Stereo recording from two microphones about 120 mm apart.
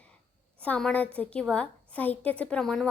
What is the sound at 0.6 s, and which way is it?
A woman's voice, 10° left (ahead or behind).